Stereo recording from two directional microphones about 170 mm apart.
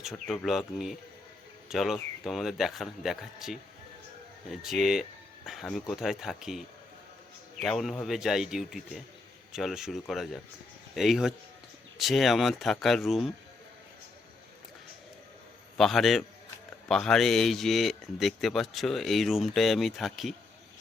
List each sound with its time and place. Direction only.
0.0 s speech: centre (ahead or behind)
7.6 s speech: centre (ahead or behind)
15.8 s speech: centre (ahead or behind)